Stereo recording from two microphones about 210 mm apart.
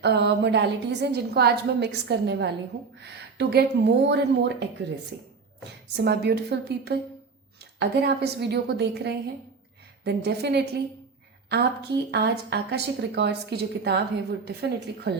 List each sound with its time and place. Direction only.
0.0 s a woman's voice: 50° right (ahead or behind)
6.0 s a woman's voice: 50° right (ahead or behind)